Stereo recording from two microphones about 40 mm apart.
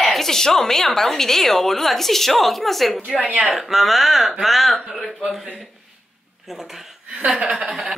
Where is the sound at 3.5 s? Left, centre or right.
Centre.